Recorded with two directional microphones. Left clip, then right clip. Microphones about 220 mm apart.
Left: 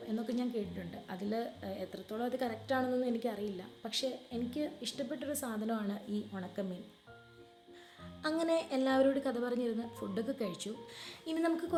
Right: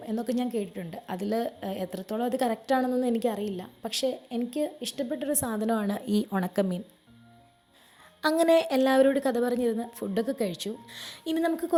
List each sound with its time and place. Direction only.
0.2 s a woman's voice: 35° right (ahead or behind)
8.2 s a woman's voice: 35° right (ahead or behind)